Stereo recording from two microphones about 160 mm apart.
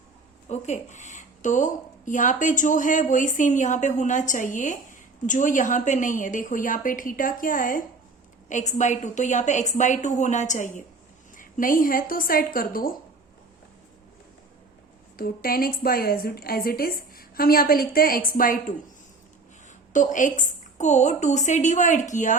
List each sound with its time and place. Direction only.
0.4 s a woman's voice: 45° left (ahead or behind); by 12.9 s 65° left (ahead or behind)
15.1 s a woman's voice: 65° left (ahead or behind)
19.9 s a woman's voice: 55° left (ahead or behind)